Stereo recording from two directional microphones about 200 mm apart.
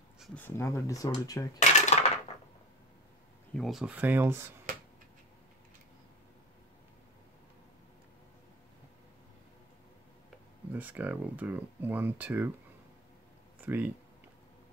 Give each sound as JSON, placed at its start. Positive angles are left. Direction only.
{"t": 0.2, "sound": "speech", "side_deg": 10}
{"t": 1.6, "sound": "dishes", "side_deg": 35}
{"t": 3.5, "sound": "speech", "side_deg": 0}
{"t": 10.7, "sound": "speech", "side_deg": -10}
{"t": 13.7, "sound": "speech", "side_deg": -5}